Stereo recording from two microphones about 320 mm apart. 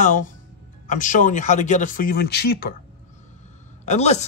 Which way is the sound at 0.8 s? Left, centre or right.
Left.